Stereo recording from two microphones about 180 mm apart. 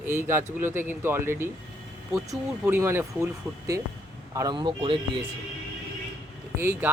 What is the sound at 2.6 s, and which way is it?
Speech, 10° right (ahead or behind).